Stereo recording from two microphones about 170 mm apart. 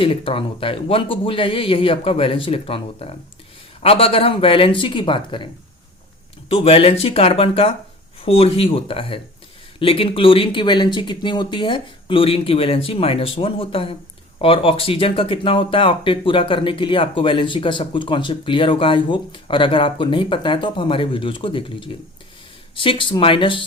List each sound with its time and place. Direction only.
0.0 s speech: 30° left (ahead or behind)
6.5 s speech: 35° left (ahead or behind)